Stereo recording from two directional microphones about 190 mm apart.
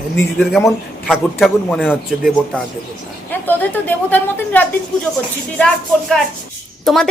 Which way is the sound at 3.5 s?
10° left (ahead or behind).